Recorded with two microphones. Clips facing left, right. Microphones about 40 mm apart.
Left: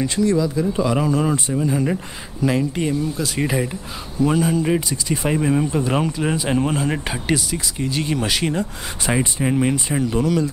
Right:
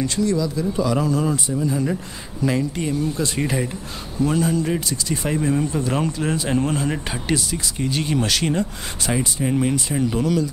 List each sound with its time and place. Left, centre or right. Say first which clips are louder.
0.0 s speech: left 2 dB; left; by 8.6 s centre
9.0 s speech: left 2 dB; left
10.0 s speech: left 1 dB; centre